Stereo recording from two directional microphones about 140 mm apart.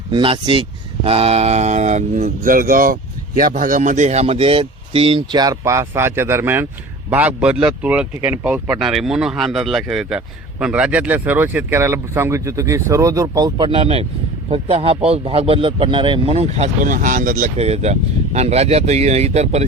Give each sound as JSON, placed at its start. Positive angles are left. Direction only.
{"t": 0.1, "sound": "speech", "side_deg": -35}
{"t": 13.7, "sound": "speech", "side_deg": -45}
{"t": 16.8, "sound": "speech", "side_deg": -70}
{"t": 17.6, "sound": "speech", "side_deg": -50}